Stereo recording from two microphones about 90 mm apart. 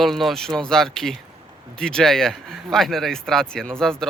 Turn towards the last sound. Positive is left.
turn(degrees=5)  # may be behind; listen again after turning